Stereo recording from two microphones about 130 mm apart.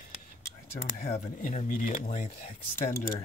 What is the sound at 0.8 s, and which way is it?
Speech, 75° left (ahead or behind).